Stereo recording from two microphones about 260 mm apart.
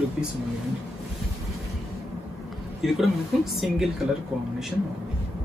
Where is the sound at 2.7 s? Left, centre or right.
Centre.